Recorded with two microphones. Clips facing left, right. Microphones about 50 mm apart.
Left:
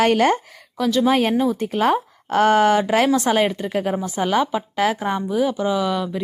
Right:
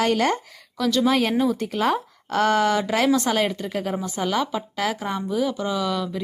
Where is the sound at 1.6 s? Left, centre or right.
Left.